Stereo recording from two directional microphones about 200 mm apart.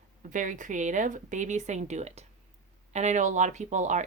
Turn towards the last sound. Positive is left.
turn(degrees=-35)  # may be behind; listen again after turning